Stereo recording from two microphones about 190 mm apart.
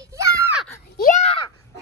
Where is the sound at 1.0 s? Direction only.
40° left (ahead or behind).